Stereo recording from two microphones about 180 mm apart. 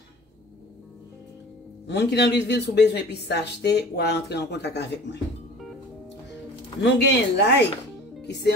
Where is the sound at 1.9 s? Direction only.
70° left (ahead or behind).